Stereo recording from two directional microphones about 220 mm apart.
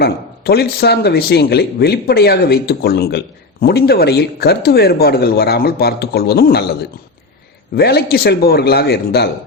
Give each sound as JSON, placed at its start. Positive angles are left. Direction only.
{"t": 0.0, "sound": "speech", "side_deg": 45}
{"t": 7.8, "sound": "speech", "side_deg": 45}